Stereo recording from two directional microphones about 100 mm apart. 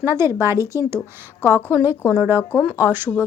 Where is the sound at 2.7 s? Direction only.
20° right (ahead or behind).